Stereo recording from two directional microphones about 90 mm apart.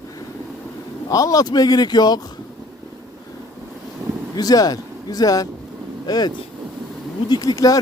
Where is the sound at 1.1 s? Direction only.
40° left (ahead or behind).